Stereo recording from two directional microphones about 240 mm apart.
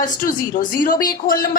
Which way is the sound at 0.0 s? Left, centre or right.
Left.